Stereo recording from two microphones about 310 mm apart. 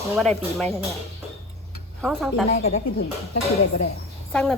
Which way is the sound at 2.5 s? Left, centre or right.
Left.